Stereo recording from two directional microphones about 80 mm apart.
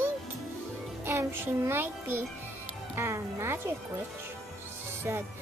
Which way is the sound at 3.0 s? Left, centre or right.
Right.